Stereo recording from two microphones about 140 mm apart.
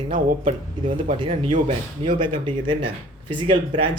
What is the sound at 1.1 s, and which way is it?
Speech, 40° right (ahead or behind).